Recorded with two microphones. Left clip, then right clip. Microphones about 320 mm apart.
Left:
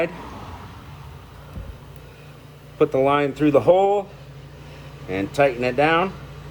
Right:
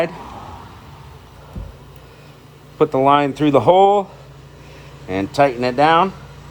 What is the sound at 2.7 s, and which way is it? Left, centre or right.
Speech, right.